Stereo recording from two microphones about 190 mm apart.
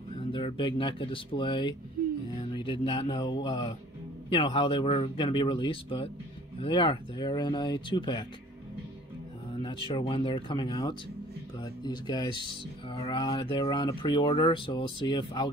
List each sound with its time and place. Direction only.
0.3 s speech: 25° left (ahead or behind)
9.6 s speech: 25° left (ahead or behind)